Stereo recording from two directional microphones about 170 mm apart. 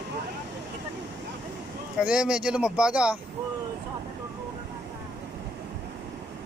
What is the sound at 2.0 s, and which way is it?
Speech, 5° right (ahead or behind).